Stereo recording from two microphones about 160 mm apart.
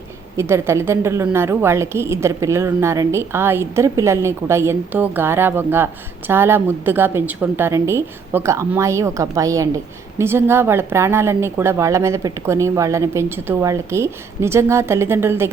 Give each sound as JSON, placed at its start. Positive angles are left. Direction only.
{"t": 0.3, "sound": "a woman's voice", "side_deg": -15}